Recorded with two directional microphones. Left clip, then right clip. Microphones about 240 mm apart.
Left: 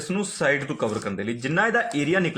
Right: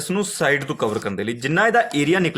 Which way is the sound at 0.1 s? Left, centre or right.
Right.